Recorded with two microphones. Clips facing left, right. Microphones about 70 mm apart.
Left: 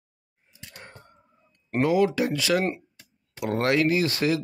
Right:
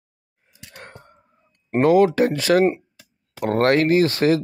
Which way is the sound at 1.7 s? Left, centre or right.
Right.